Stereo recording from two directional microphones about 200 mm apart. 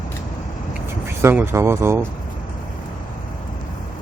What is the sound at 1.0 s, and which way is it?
Speech, 10° right (ahead or behind).